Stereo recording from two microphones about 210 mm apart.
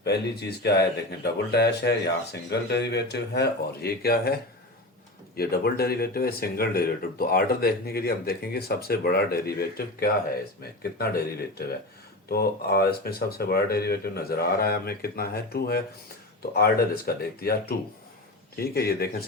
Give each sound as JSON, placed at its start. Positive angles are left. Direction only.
{"t": 0.0, "sound": "speech", "side_deg": 50}
{"t": 5.4, "sound": "speech", "side_deg": 50}